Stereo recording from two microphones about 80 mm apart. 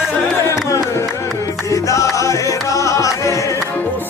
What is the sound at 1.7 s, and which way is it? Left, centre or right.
Music, left.